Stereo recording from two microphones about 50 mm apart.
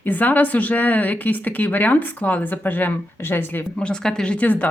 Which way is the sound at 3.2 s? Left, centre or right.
Left.